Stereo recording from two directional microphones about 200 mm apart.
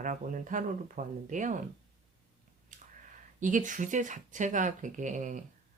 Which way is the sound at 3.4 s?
40° right (ahead or behind).